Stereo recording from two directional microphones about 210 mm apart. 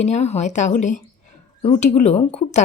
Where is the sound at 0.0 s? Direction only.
30° left (ahead or behind).